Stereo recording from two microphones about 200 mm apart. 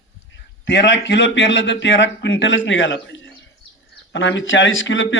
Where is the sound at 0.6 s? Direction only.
60° left (ahead or behind).